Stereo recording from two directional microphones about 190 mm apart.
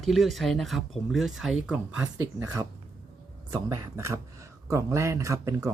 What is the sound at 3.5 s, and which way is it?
Speech, 15° right (ahead or behind).